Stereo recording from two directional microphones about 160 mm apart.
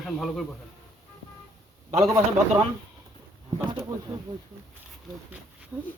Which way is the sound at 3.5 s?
25° right (ahead or behind).